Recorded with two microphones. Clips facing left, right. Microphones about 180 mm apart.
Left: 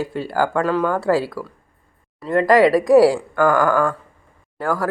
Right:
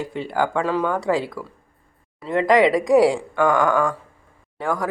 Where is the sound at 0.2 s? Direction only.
5° left (ahead or behind).